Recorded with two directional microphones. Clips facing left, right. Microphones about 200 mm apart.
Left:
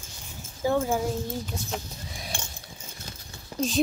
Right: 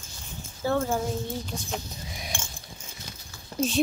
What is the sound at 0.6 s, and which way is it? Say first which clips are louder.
Speech: left 1 dB; 15° left (ahead or behind).